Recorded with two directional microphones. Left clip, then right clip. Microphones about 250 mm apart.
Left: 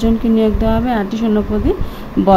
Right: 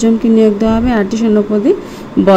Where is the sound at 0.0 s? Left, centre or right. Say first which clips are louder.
Right 5 dB; centre.